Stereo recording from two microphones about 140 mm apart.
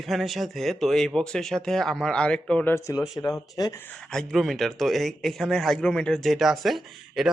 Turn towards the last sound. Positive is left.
turn(degrees=0)  # may be behind; listen again after turning